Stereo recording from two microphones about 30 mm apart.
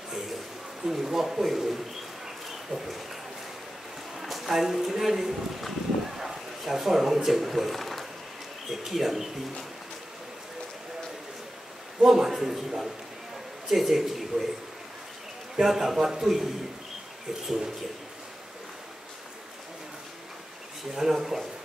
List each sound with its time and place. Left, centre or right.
0.8 s speech: centre
2.2 s a sound: centre
4.2 s speech: centre
12.0 s speech: centre
15.6 s speech: centre
20.9 s speech: centre